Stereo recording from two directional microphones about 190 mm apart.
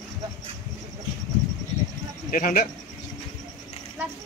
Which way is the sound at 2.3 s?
50° left (ahead or behind).